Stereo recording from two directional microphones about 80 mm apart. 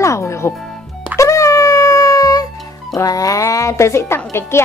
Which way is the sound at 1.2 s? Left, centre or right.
Left.